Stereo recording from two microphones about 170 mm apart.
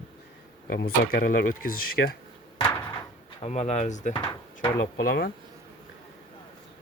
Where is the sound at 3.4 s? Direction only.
40° left (ahead or behind).